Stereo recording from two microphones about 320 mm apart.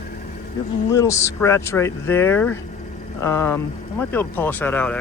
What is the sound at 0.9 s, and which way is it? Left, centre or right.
Speech, centre.